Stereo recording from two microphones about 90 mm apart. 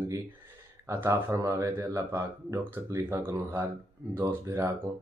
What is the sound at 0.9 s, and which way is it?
Speech, 35° right (ahead or behind).